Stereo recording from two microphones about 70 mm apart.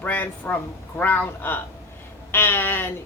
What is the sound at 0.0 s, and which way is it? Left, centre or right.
Speech, left.